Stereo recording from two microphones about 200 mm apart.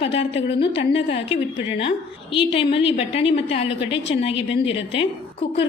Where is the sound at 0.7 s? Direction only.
25° left (ahead or behind).